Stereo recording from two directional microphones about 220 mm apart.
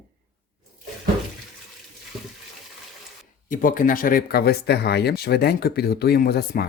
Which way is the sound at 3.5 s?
40° left (ahead or behind).